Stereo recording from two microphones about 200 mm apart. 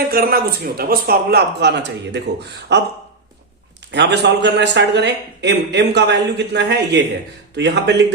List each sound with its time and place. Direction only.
0.1 s a man's voice: 50° right (ahead or behind)
3.9 s a man's voice: 60° right (ahead or behind)